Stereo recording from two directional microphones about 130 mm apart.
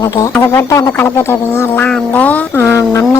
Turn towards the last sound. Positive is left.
turn(degrees=25)  # may be behind; listen again after turning